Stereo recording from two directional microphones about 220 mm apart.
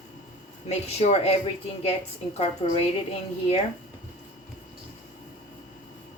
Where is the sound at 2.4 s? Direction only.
25° left (ahead or behind).